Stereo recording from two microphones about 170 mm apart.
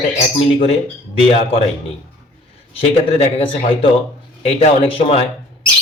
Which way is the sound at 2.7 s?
35° left (ahead or behind).